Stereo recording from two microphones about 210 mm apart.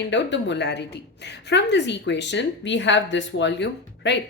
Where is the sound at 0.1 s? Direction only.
60° left (ahead or behind).